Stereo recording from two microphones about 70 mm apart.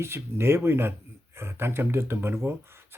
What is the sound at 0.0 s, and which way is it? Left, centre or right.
Speech, right.